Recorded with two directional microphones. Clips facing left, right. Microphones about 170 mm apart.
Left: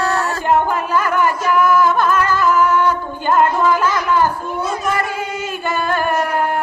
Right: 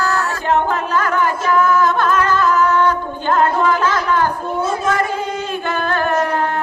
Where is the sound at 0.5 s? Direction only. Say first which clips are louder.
Left 1 dB; 10° left (ahead or behind).